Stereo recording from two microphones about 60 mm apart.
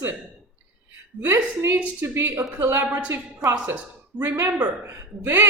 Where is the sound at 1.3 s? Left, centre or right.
Right.